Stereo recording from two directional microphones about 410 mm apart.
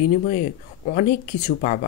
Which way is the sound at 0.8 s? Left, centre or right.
Centre.